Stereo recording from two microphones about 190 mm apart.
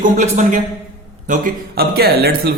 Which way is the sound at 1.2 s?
50° right (ahead or behind).